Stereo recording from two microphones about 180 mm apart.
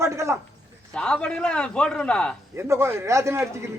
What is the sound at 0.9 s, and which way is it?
A man's voice, 5° left (ahead or behind).